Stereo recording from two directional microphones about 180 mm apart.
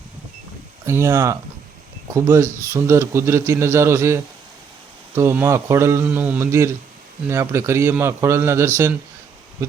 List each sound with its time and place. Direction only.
0.9 s a man's voice: 15° right (ahead or behind)